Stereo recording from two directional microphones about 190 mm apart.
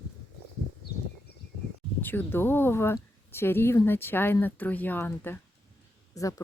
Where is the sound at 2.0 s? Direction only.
10° left (ahead or behind).